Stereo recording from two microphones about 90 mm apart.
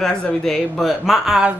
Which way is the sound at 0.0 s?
5° left (ahead or behind).